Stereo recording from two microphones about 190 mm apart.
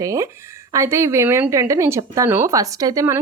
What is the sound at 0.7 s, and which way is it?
Speech, 15° right (ahead or behind).